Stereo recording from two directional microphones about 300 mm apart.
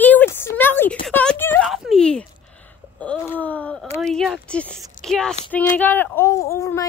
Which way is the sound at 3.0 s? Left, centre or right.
Centre.